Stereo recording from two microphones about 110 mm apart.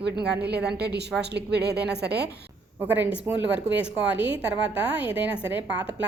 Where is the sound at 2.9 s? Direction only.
10° right (ahead or behind).